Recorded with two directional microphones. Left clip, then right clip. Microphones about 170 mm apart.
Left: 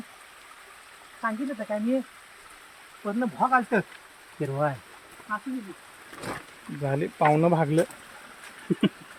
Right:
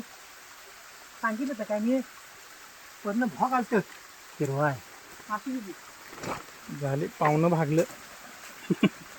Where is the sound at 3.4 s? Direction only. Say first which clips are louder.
Left 4 dB; 55° left (ahead or behind).